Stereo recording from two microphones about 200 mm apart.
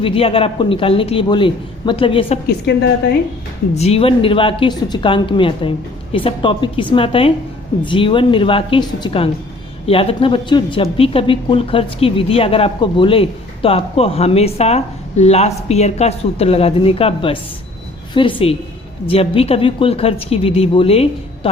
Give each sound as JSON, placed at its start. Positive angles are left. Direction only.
{"t": 0.0, "sound": "speech", "side_deg": 30}
{"t": 2.5, "sound": "a woman's voice", "side_deg": 55}
{"t": 3.8, "sound": "speech", "side_deg": 30}